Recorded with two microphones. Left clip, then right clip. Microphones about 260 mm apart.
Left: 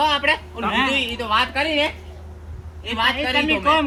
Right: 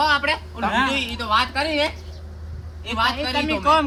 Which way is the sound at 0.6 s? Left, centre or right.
Centre.